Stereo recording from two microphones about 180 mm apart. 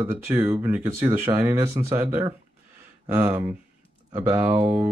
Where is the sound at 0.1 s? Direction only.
15° right (ahead or behind).